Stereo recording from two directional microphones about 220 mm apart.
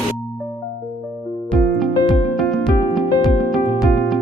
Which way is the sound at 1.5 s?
Centre (ahead or behind).